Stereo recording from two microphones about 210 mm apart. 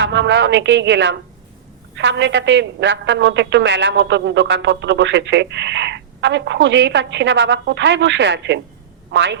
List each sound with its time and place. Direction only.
0.0 s a woman's voice: 60° right (ahead or behind)